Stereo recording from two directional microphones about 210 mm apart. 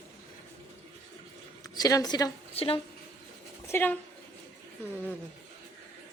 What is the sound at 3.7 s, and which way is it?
Speech, 10° left (ahead or behind).